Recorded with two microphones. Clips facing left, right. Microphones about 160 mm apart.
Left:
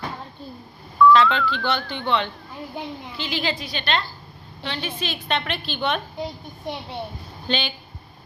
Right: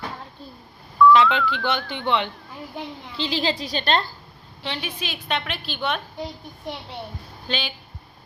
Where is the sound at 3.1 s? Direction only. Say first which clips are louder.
Right 3 dB; 30° right (ahead or behind).